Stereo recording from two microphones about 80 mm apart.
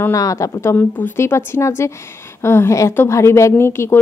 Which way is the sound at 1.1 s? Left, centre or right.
Left.